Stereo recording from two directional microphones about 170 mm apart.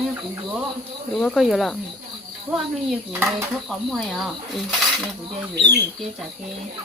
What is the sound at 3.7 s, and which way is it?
Speech, centre (ahead or behind).